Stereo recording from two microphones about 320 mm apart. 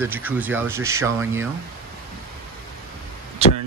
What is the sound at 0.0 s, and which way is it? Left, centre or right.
Speech, centre.